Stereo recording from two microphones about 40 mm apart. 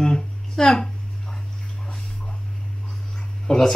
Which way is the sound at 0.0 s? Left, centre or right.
Centre.